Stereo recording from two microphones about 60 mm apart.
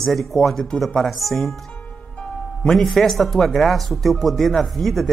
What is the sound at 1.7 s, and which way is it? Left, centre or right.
Music, centre.